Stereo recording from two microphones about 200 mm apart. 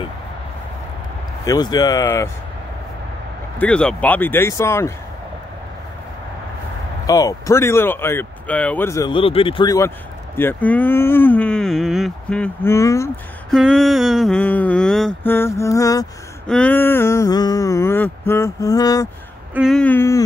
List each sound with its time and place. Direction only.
1.4 s speech: 20° left (ahead or behind)
3.5 s speech: 5° left (ahead or behind)
7.1 s speech: 15° left (ahead or behind)
13.5 s a sound: centre (ahead or behind)
16.4 s speech: 5° left (ahead or behind)
19.5 s speech: centre (ahead or behind)